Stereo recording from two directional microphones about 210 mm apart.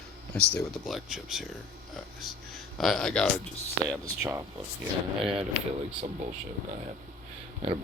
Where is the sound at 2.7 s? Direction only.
Centre (ahead or behind).